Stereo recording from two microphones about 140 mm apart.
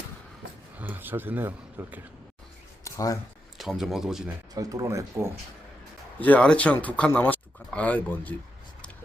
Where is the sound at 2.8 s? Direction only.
25° left (ahead or behind).